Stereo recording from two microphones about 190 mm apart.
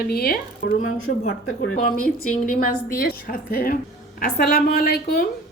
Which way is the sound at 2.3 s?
45° left (ahead or behind).